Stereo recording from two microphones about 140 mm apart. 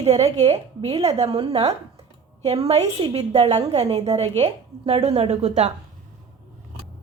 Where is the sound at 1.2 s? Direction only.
30° right (ahead or behind).